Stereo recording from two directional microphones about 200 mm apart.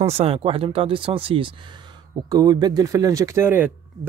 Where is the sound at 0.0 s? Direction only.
30° right (ahead or behind).